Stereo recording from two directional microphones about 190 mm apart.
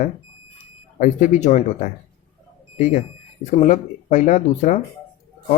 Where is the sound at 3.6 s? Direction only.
40° left (ahead or behind).